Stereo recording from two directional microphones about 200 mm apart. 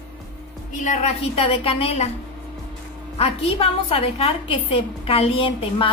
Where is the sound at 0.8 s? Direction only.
30° left (ahead or behind).